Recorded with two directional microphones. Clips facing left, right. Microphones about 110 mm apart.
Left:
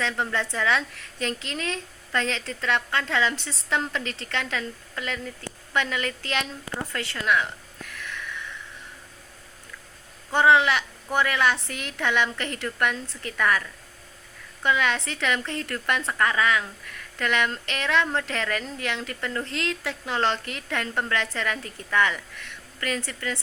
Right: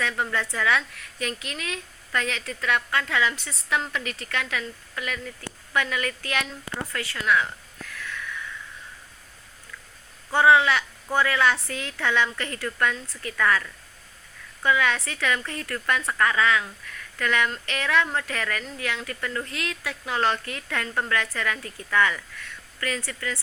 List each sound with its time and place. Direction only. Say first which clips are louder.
0.0 s a woman's voice: even; 25° left (ahead or behind)
6.9 s a sound: right 1 dB; 25° left (ahead or behind)
10.3 s a woman's voice: right 1 dB; 20° left (ahead or behind)